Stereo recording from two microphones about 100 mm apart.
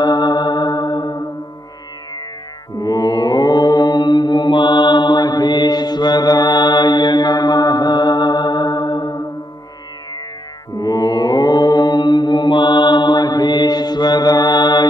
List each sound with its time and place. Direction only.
0.0 s music: 45° left (ahead or behind)
2.8 s mantra: 40° left (ahead or behind)
10.8 s mantra: 40° left (ahead or behind)